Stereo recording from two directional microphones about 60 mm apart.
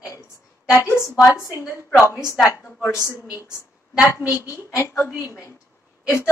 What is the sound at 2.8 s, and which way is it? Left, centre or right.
A woman's voice, left.